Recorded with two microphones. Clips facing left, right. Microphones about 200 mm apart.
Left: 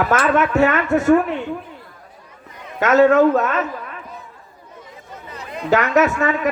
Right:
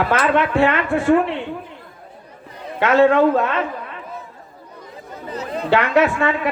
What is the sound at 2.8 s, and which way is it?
Speech, 45° left (ahead or behind).